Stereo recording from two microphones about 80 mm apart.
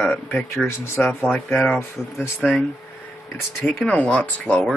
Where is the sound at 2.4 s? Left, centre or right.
Centre.